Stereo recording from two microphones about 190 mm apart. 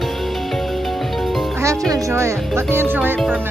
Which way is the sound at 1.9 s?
15° right (ahead or behind).